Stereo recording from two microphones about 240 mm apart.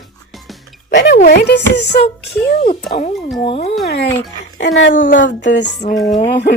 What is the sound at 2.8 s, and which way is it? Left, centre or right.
Speech, left.